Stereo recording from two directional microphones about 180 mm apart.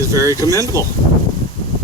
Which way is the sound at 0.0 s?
15° right (ahead or behind).